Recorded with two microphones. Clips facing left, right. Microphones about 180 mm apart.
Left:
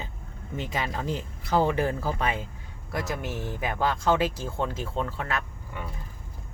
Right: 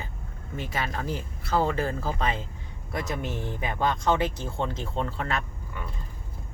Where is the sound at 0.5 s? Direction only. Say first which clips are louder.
Left 1 dB; 20° left (ahead or behind).